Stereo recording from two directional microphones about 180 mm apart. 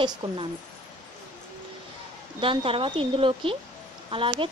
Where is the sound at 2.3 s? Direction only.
30° right (ahead or behind).